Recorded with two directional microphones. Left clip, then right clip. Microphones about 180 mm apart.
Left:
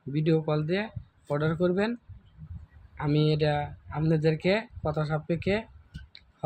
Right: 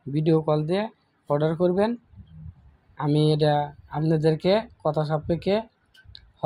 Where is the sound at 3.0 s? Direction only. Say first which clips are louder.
Right 4 dB; 20° right (ahead or behind).